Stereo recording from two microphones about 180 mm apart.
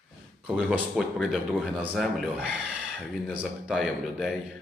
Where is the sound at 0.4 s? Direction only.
Centre (ahead or behind).